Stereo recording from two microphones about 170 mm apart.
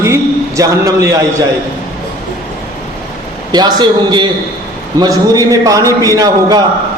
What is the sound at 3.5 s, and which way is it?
A man's voice, 25° right (ahead or behind).